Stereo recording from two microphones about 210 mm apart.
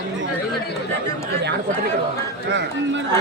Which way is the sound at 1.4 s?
55° right (ahead or behind).